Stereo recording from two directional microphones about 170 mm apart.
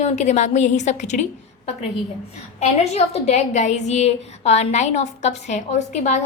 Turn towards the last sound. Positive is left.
turn(degrees=45)  # may be behind; listen again after turning